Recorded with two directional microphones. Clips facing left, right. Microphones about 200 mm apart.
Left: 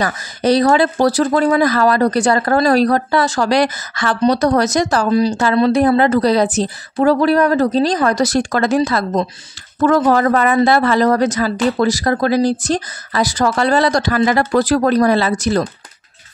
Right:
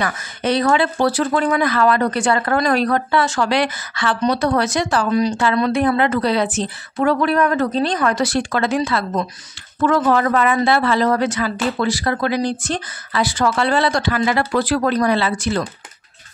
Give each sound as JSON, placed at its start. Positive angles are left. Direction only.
{"t": 0.0, "sound": "speech", "side_deg": 35}